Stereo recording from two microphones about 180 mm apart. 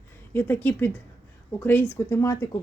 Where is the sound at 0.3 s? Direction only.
10° left (ahead or behind).